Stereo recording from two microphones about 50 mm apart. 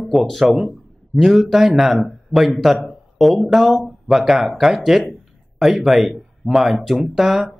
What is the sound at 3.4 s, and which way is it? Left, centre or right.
Speech, centre.